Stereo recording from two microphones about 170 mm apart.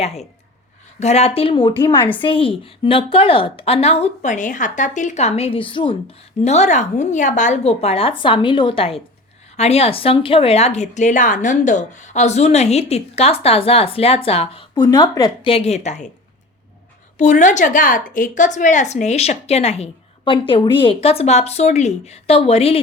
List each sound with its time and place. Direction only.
0.0 s a woman's voice: 40° left (ahead or behind)
6.4 s a woman's voice: 40° left (ahead or behind)
14.8 s a woman's voice: 20° left (ahead or behind); by 16.1 s 45° left (ahead or behind)
17.2 s a woman's voice: 45° left (ahead or behind)